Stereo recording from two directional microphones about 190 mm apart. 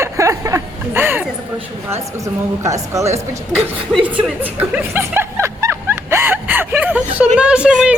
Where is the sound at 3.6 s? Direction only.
10° right (ahead or behind).